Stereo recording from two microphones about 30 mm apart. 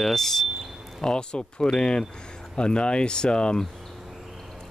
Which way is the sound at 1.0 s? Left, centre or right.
Left.